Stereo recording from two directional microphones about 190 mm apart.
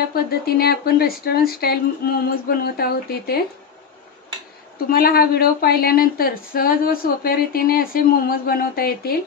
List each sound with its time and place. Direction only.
0.1 s a woman's voice: 55° left (ahead or behind)
4.8 s a woman's voice: 50° left (ahead or behind)